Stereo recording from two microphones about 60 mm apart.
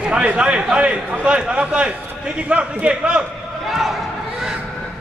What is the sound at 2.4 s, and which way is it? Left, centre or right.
Speech, centre.